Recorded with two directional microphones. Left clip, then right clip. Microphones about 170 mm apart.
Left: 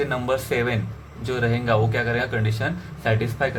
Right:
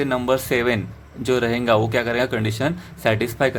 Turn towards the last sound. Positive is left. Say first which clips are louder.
# right 4 dB
turn(degrees=-60)  # may be behind; listen again after turning